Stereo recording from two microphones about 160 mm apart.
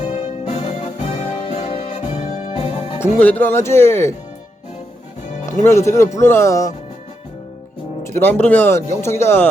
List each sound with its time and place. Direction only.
0.0 s music: 35° left (ahead or behind)
3.0 s speech: 10° left (ahead or behind)
5.5 s speech: 15° left (ahead or behind)
8.1 s speech: 10° left (ahead or behind)